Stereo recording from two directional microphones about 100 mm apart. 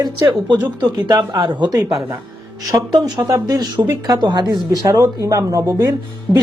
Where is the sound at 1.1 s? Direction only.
45° right (ahead or behind).